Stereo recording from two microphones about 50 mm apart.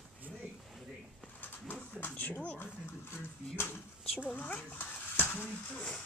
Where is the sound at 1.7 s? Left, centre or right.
Left.